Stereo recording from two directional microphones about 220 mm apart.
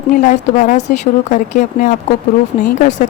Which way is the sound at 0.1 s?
35° left (ahead or behind).